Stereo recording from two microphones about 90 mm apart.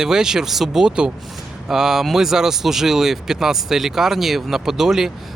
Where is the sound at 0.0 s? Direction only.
5° right (ahead or behind).